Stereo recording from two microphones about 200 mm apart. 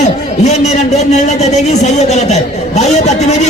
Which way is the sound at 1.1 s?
35° left (ahead or behind).